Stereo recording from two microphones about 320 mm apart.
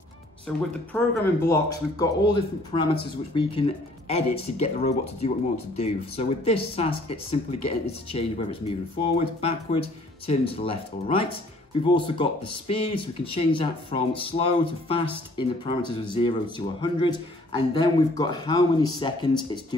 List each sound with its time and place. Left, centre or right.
0.5 s speech: centre